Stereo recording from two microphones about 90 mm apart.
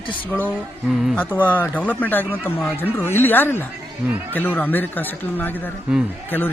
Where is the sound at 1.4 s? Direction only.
20° left (ahead or behind).